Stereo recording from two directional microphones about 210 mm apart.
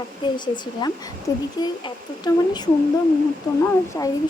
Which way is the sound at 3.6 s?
15° left (ahead or behind).